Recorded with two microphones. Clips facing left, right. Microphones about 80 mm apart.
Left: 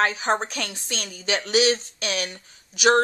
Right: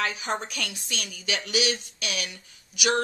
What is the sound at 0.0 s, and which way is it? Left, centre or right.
A woman's voice, left.